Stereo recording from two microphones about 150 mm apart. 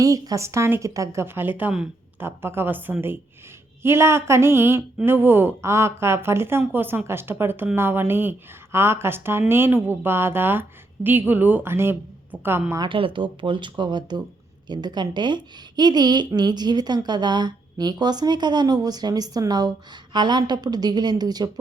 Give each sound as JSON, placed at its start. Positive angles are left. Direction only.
{"t": 0.0, "sound": "speech", "side_deg": -25}
{"t": 12.8, "sound": "a woman's voice", "side_deg": -35}